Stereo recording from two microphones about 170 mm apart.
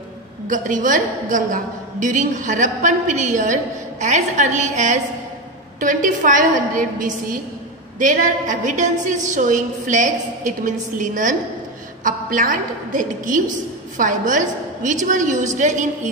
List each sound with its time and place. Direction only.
0.5 s a woman's voice: 50° right (ahead or behind)